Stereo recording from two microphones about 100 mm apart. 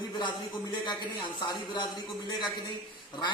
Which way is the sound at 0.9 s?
50° left (ahead or behind).